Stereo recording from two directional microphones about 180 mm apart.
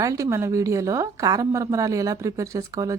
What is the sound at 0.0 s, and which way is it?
Speech, 20° right (ahead or behind).